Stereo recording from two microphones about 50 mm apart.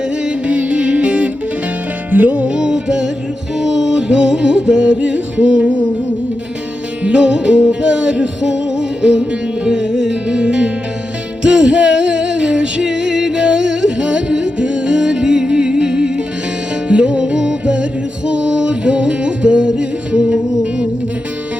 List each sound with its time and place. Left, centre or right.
0.3 s music: right
2.0 s music: right
2.5 s music: centre
7.0 s music: right